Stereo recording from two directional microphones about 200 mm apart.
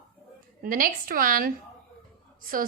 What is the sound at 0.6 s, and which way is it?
A woman's voice, 45° right (ahead or behind).